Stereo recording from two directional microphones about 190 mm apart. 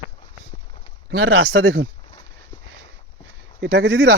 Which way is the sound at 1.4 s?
80° right.